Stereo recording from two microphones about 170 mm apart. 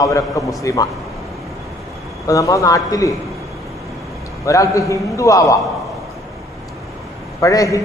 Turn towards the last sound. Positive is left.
turn(degrees=20)  # may be behind; listen again after turning